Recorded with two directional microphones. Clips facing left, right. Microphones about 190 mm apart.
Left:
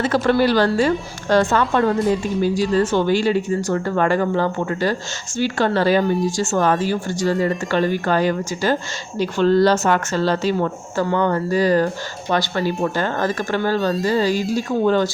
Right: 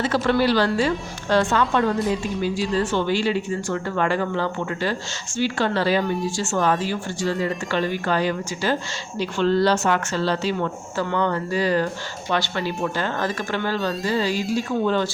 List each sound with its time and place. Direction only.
0.0 s speech: 50° left (ahead or behind)